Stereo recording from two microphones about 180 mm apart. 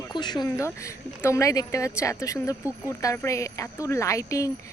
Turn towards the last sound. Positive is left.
turn(degrees=15)  # may be behind; listen again after turning